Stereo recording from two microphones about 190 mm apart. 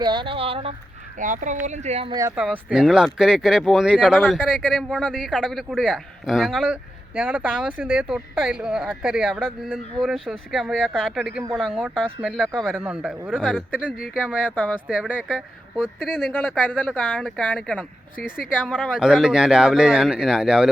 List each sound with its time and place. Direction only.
0.0 s speech: 25° right (ahead or behind)
1.2 s speech: 40° right (ahead or behind)
2.3 s speech: 5° right (ahead or behind)
16.3 s speech: 10° left (ahead or behind)